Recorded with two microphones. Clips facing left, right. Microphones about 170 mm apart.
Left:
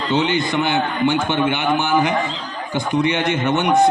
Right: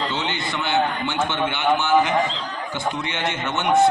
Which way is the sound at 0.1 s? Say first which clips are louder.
Left 8 dB; 15° left (ahead or behind).